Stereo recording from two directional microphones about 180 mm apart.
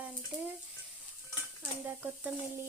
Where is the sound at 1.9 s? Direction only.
10° right (ahead or behind).